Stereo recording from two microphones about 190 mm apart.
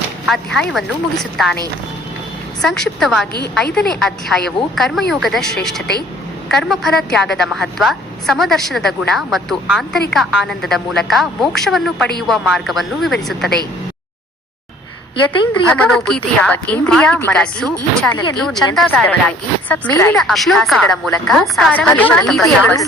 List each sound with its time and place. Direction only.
0.3 s a woman's voice: centre (ahead or behind)
2.6 s a woman's voice: 5° left (ahead or behind)
15.3 s a woman's voice: 25° left (ahead or behind)
15.7 s a woman's voice: 5° left (ahead or behind)